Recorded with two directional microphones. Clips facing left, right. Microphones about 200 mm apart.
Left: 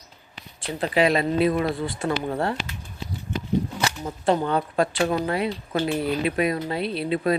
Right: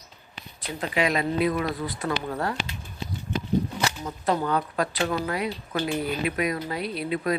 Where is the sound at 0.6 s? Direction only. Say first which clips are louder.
Left 5 dB; 30° left (ahead or behind).